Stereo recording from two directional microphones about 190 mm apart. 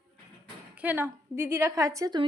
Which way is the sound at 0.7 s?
10° right (ahead or behind).